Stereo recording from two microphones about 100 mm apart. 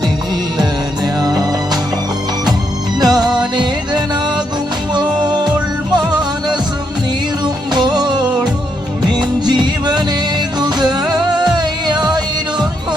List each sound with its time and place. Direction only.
1.0 s music: 40° right (ahead or behind)
3.0 s music: 45° right (ahead or behind)